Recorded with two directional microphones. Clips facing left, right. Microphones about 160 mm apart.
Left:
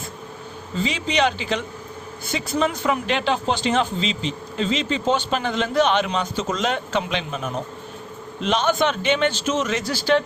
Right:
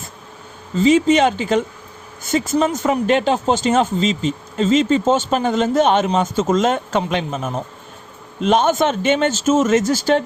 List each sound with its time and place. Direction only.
0.8 s speech: 45° right (ahead or behind)